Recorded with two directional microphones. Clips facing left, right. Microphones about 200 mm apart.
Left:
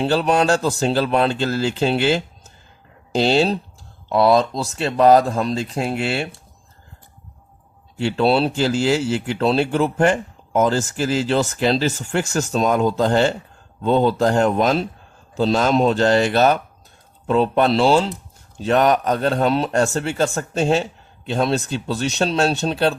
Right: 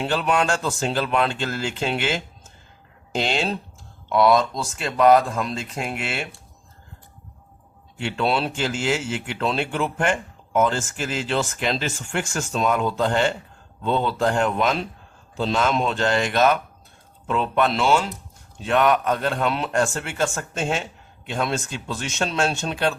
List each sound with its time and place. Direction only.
0.0 s speech: 35° left (ahead or behind)
7.9 s speech: 35° left (ahead or behind)